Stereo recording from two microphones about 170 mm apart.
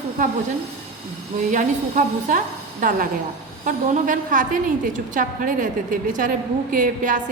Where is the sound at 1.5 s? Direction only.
50° right (ahead or behind).